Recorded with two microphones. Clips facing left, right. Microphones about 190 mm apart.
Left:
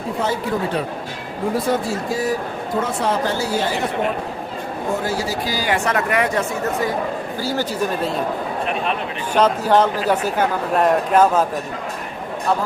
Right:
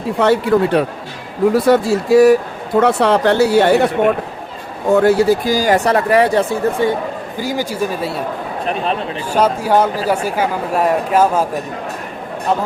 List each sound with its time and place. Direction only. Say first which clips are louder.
0.2 s speech: right 10 dB; 70° right (ahead or behind); by 6.9 s 30° right (ahead or behind)
7.3 s speech: right 3 dB; 15° right (ahead or behind)
8.6 s speech: right 5 dB; 35° right (ahead or behind)
9.3 s speech: right 1 dB; 10° right (ahead or behind)